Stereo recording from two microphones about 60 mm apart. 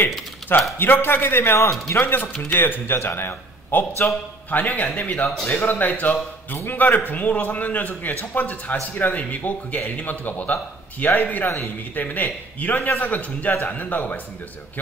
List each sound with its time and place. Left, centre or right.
0.7 s a man's voice: left
1.6 s a man's voice: left
4.0 s a man's voice: left
5.5 s speech: left
5.8 s a man's voice: left
11.5 s speech: left
12.0 s a man's voice: left